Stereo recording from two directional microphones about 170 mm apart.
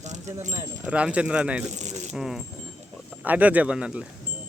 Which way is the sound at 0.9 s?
5° right (ahead or behind).